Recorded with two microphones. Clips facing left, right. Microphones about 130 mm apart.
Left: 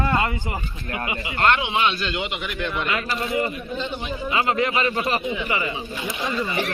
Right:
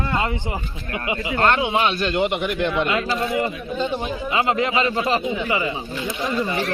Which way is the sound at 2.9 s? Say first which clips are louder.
Right 3 dB; 25° right (ahead or behind).